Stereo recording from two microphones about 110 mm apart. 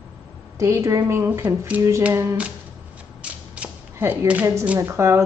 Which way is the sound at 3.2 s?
10° right (ahead or behind).